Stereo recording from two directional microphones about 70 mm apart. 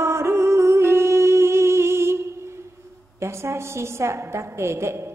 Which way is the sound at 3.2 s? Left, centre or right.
Right.